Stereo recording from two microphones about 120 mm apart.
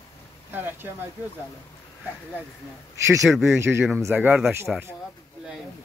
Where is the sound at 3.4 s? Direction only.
20° right (ahead or behind).